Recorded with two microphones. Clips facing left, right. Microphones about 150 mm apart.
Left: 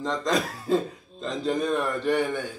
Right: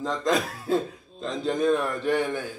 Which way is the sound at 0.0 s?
Centre (ahead or behind).